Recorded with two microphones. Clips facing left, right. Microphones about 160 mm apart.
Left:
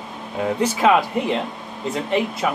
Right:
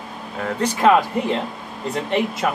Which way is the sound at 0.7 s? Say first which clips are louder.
Right 3 dB; centre (ahead or behind).